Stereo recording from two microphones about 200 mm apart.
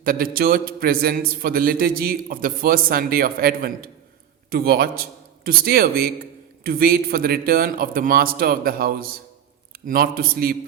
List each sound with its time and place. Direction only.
0.0 s a man's voice: 45° right (ahead or behind)